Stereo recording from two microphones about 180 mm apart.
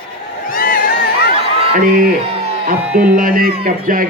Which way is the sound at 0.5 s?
50° left (ahead or behind).